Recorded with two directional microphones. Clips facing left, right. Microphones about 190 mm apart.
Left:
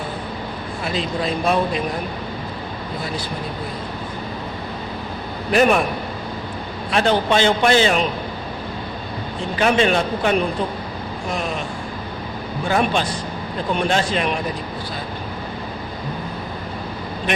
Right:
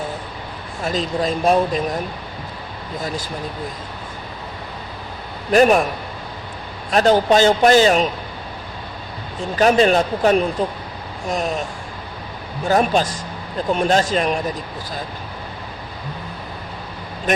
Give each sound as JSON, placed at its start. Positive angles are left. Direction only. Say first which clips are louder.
{"t": 0.9, "sound": "a man's voice", "louder": "right 3 dB", "side_deg": -40}
{"t": 5.5, "sound": "a man's voice", "louder": "right 3 dB", "side_deg": -40}
{"t": 6.9, "sound": "a man's voice", "louder": "right 4 dB", "side_deg": -40}
{"t": 9.6, "sound": "a man's voice", "louder": "right 3 dB", "side_deg": -40}
{"t": 12.6, "sound": "a man's voice", "louder": "right 3 dB", "side_deg": -40}
{"t": 17.3, "sound": "speech", "louder": "right 3 dB", "side_deg": -45}